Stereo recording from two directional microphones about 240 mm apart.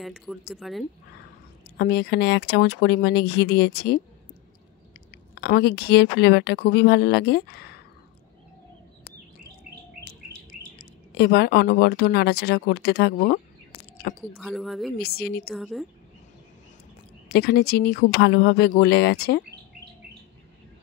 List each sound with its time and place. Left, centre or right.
0.0 s speech: centre
1.8 s speech: left
5.3 s speech: left
11.1 s speech: left
14.3 s speech: centre
15.0 s speech: left
15.5 s speech: centre
17.3 s speech: left